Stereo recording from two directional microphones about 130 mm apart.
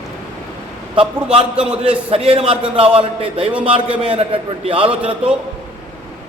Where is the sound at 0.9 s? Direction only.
45° right (ahead or behind).